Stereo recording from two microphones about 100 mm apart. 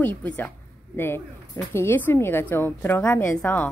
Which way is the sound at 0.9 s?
20° left (ahead or behind).